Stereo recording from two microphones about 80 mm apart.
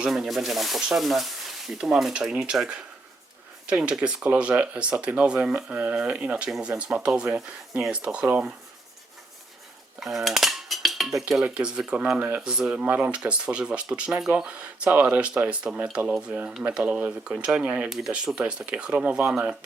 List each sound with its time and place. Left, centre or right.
0.1 s speech: centre
10.0 s cutlery: centre
11.4 s speech: centre